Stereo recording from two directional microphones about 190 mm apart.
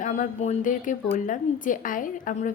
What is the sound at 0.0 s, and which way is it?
A woman's voice, 40° left (ahead or behind).